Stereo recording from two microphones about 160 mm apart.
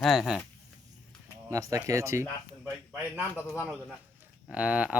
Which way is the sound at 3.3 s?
15° left (ahead or behind).